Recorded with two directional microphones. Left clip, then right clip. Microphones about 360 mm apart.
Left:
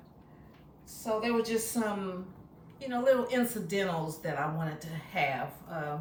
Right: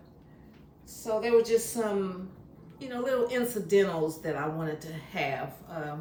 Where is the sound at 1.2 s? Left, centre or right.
Centre.